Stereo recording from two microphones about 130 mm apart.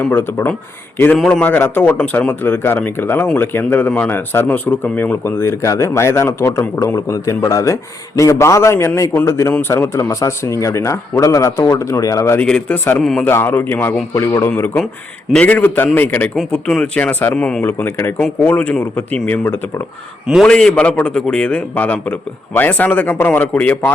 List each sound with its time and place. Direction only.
0.1 s speech: 15° left (ahead or behind)
12.5 s speech: 10° left (ahead or behind)
13.0 s speech: centre (ahead or behind)
13.2 s speech: 15° left (ahead or behind)